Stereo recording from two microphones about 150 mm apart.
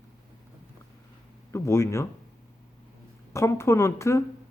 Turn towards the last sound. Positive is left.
turn(degrees=20)  # may be behind; listen again after turning